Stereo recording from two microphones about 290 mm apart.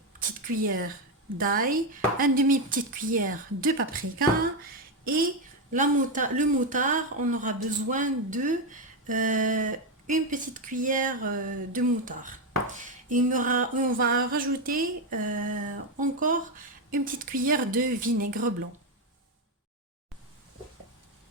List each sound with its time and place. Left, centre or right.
0.5 s speech: right
1.4 s speech: right
5.7 s speech: right